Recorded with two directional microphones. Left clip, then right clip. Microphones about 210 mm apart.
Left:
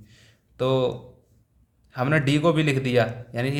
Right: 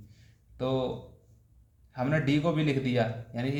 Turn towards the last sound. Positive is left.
turn(degrees=35)  # may be behind; listen again after turning